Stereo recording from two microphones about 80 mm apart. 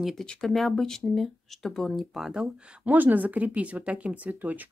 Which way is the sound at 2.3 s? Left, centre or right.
Centre.